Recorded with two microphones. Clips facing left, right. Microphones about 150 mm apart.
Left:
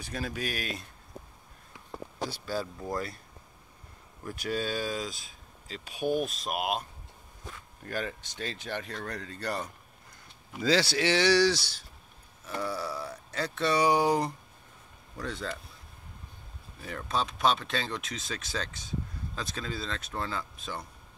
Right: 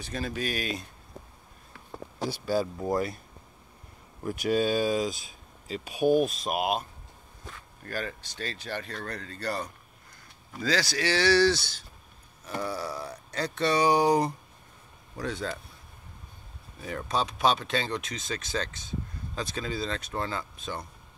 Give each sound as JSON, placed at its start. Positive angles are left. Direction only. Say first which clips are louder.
{"t": 0.0, "sound": "speech", "louder": "right 2 dB", "side_deg": 10}
{"t": 2.4, "sound": "speech", "louder": "right 9 dB", "side_deg": -15}
{"t": 4.2, "sound": "speech", "louder": "right 7 dB", "side_deg": -15}
{"t": 5.9, "sound": "speech", "louder": "right 6 dB", "side_deg": -45}
{"t": 6.2, "sound": "speech", "louder": "right 4 dB", "side_deg": -5}
{"t": 7.8, "sound": "speech", "louder": "even", "side_deg": 15}
{"t": 8.9, "sound": "speech", "louder": "even", "side_deg": 5}
{"t": 9.3, "sound": "speech", "louder": "right 2 dB", "side_deg": 15}
{"t": 10.6, "sound": "speech", "louder": "left 2 dB", "side_deg": 30}
{"t": 16.8, "sound": "speech", "louder": "right 2 dB", "side_deg": -5}